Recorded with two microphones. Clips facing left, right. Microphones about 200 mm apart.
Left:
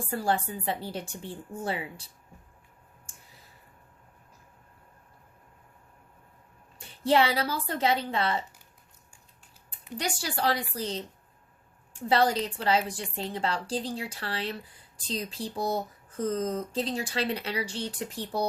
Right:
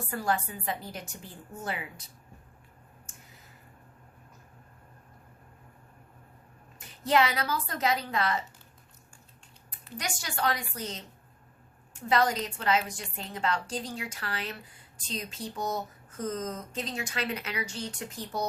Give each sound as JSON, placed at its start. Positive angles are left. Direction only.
{"t": 0.0, "sound": "speech", "side_deg": 30}
{"t": 3.1, "sound": "a sound", "side_deg": 30}
{"t": 6.7, "sound": "speech", "side_deg": 30}
{"t": 10.0, "sound": "speech", "side_deg": 30}